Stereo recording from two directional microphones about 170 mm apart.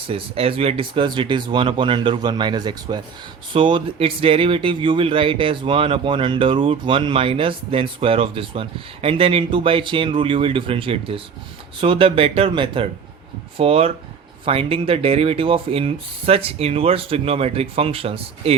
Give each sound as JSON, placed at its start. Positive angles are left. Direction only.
{"t": 0.1, "sound": "speech", "side_deg": -35}